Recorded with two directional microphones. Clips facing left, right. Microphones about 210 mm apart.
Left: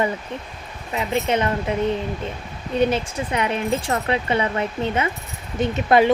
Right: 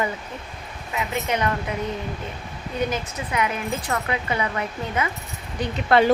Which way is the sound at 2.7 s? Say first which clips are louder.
Left 6 dB; 30° left (ahead or behind).